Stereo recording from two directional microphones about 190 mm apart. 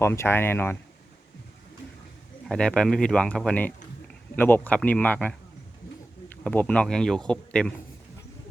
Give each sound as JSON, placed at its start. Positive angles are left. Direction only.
{"t": 0.0, "sound": "speech", "side_deg": 15}
{"t": 2.5, "sound": "speech", "side_deg": 5}